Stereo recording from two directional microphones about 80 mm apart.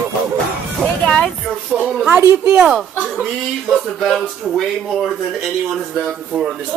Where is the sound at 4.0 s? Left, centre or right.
Centre.